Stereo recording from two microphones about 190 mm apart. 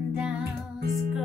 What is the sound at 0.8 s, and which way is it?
Music, 55° right (ahead or behind).